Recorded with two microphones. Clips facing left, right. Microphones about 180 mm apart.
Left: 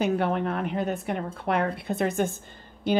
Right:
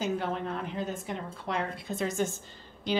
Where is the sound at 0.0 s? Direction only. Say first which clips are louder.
Left 6 dB; 65° left (ahead or behind).